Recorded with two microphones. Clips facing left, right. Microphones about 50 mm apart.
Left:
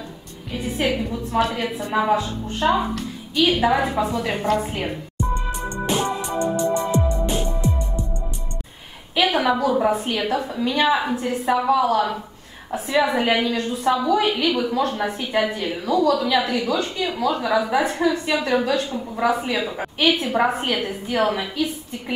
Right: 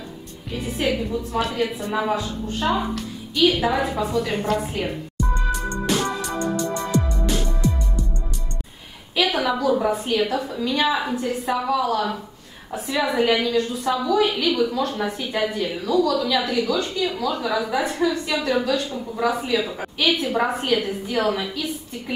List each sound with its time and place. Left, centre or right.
0.5 s music: centre
0.7 s a woman's voice: centre
4.3 s music: centre
9.2 s a woman's voice: centre
14.2 s a woman's voice: centre
15.8 s a woman's voice: left
16.2 s a woman's voice: centre